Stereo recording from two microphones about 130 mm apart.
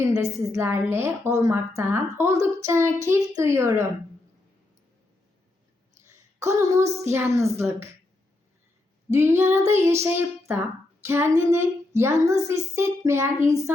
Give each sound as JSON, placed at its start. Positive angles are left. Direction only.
{"t": 0.1, "sound": "a woman's voice", "side_deg": -20}
{"t": 5.9, "sound": "a sound", "side_deg": -20}
{"t": 7.0, "sound": "a woman's voice", "side_deg": -20}
{"t": 9.0, "sound": "a woman's voice", "side_deg": -20}